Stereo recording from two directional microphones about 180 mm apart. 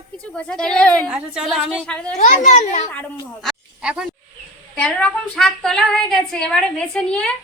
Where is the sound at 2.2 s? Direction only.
40° left (ahead or behind).